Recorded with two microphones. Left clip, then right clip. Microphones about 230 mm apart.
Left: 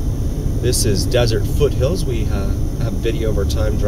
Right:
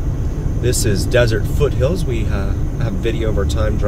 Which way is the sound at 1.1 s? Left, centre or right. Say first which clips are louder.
Right 5 dB; centre.